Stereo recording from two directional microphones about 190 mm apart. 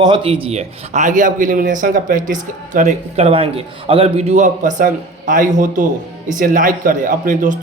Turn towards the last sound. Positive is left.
turn(degrees=-45)  # may be behind; listen again after turning